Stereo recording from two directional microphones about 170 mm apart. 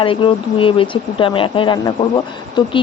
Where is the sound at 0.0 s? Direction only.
30° left (ahead or behind).